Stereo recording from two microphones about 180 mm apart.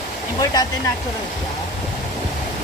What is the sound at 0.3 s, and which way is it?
Speech, 20° left (ahead or behind).